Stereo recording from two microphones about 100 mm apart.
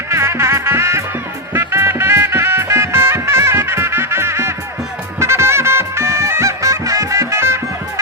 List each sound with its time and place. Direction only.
0.1 s music: 25° right (ahead or behind)